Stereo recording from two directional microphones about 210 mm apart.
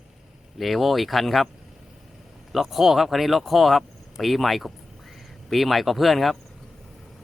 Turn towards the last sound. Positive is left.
turn(degrees=0)  # may be behind; listen again after turning